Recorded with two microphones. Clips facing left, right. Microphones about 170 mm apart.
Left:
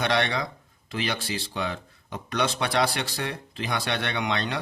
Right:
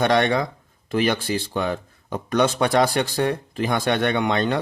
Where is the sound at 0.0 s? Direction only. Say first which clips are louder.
Right 6 dB; 45° right (ahead or behind).